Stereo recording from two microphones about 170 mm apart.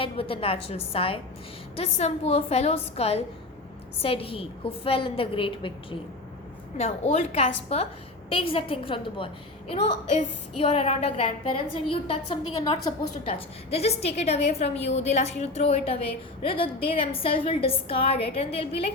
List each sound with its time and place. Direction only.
0.0 s a woman's voice: 35° left (ahead or behind)